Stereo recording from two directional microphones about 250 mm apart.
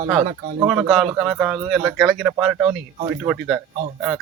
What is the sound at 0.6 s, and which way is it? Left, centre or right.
Speech, centre.